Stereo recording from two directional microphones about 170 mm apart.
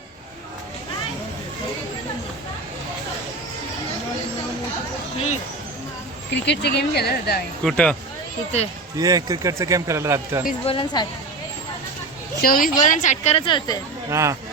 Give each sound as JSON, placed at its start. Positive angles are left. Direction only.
{"t": 6.3, "sound": "speech", "side_deg": 90}
{"t": 7.6, "sound": "speech", "side_deg": 5}
{"t": 9.0, "sound": "a man's voice", "side_deg": -20}
{"t": 10.7, "sound": "speech", "side_deg": 30}
{"t": 12.4, "sound": "a woman's voice", "side_deg": 55}
{"t": 14.1, "sound": "speech", "side_deg": -15}